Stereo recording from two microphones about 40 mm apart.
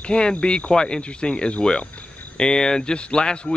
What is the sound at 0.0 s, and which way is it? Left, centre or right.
Speech, left.